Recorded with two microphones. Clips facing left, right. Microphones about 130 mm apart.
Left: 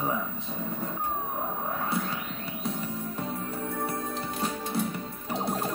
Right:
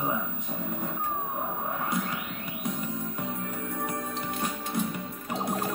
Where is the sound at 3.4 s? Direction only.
35° left (ahead or behind).